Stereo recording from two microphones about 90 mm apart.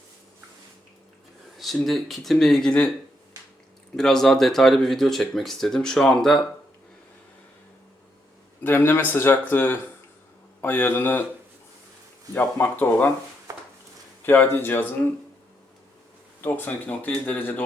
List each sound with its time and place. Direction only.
1.5 s speech: centre (ahead or behind)
3.9 s speech: 5° left (ahead or behind)
8.6 s speech: 25° left (ahead or behind)
12.3 s speech: 20° left (ahead or behind)
13.5 s a sound: 35° right (ahead or behind)
14.2 s speech: 20° left (ahead or behind)
16.4 s speech: 20° left (ahead or behind)